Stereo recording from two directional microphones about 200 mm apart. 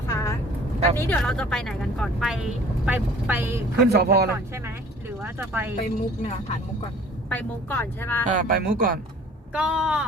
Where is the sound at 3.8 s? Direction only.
55° right (ahead or behind).